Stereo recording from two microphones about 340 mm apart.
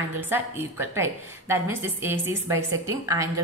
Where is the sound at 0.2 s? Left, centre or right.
Centre.